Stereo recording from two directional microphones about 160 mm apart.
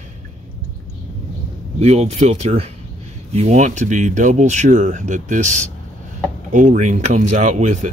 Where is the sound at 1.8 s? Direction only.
40° right (ahead or behind).